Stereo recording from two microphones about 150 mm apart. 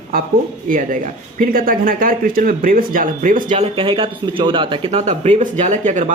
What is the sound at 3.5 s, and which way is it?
Speech, 40° right (ahead or behind).